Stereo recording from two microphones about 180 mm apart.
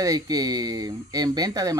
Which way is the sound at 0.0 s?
20° right (ahead or behind).